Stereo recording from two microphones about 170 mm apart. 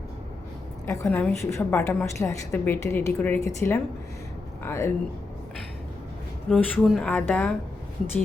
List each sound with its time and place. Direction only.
0.9 s a woman's voice: 15° left (ahead or behind)
6.5 s a woman's voice: 5° left (ahead or behind)